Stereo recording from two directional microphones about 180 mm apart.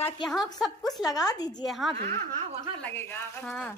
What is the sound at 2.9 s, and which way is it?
Speech, 10° left (ahead or behind).